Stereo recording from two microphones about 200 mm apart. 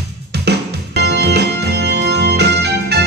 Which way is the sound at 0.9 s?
55° right (ahead or behind).